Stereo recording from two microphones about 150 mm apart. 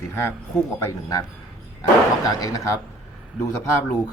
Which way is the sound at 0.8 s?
20° left (ahead or behind).